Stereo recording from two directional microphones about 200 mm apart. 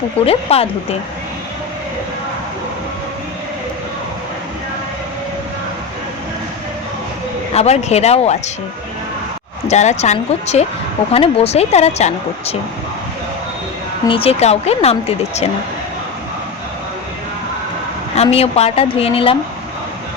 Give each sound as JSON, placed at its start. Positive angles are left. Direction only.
{"t": 0.3, "sound": "speech", "side_deg": 30}
{"t": 7.5, "sound": "speech", "side_deg": 30}
{"t": 9.6, "sound": "speech", "side_deg": 35}
{"t": 14.0, "sound": "speech", "side_deg": 25}
{"t": 18.2, "sound": "speech", "side_deg": 30}